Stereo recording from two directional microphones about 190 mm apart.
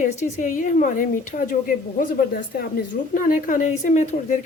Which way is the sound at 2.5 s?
50° left (ahead or behind).